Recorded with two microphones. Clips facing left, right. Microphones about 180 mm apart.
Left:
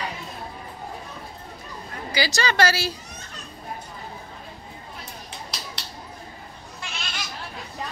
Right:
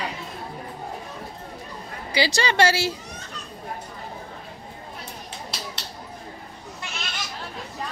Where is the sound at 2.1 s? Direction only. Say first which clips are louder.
Right 2 dB; 25° right (ahead or behind).